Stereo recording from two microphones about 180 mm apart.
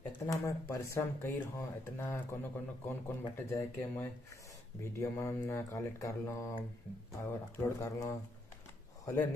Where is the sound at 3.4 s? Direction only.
15° left (ahead or behind).